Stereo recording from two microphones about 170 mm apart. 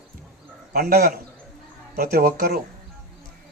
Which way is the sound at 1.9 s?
60° right (ahead or behind).